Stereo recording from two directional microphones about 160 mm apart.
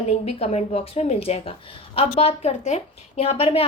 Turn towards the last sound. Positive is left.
turn(degrees=35)  # may be behind; listen again after turning